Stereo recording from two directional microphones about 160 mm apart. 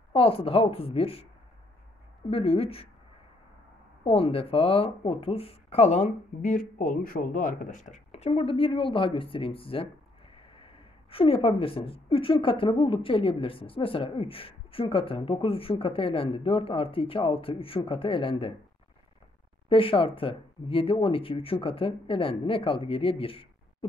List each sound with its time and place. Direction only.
0.1 s a woman's voice: 35° left (ahead or behind)
2.3 s a woman's voice: 40° left (ahead or behind)
4.0 s a woman's voice: 35° left (ahead or behind)
19.7 s a woman's voice: 35° left (ahead or behind)